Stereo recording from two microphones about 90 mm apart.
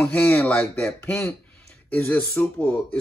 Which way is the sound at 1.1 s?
30° left (ahead or behind).